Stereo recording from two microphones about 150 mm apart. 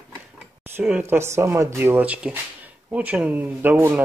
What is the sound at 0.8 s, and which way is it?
Speech, 10° right (ahead or behind).